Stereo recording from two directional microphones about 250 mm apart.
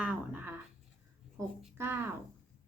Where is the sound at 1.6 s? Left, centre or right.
Centre.